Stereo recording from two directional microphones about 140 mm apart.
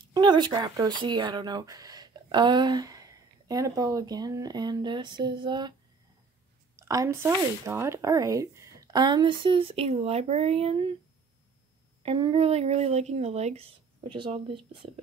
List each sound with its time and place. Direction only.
0.0 s speech: 35° right (ahead or behind)
6.8 s speech: 20° right (ahead or behind); by 10.9 s 45° right (ahead or behind)
12.0 s speech: 40° right (ahead or behind)